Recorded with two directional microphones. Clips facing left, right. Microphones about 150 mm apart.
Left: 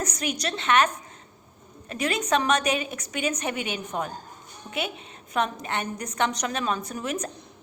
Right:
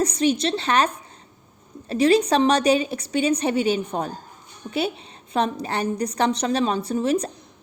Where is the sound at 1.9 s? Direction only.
30° right (ahead or behind).